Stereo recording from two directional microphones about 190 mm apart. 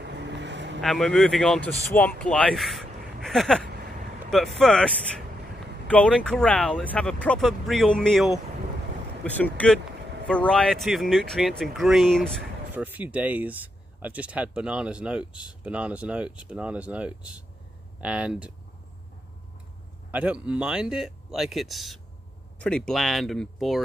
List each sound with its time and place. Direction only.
0.0 s vehicle: 65° right (ahead or behind)
0.7 s speech: centre (ahead or behind)
12.7 s speech: 10° right (ahead or behind)
20.1 s speech: 5° right (ahead or behind)